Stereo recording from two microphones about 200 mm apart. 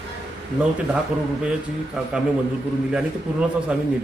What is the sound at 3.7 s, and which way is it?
Speech, 5° right (ahead or behind).